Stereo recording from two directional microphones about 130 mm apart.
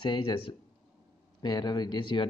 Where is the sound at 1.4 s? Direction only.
30° left (ahead or behind).